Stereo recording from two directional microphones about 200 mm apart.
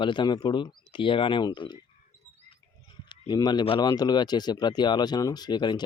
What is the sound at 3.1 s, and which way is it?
Speech, 20° left (ahead or behind).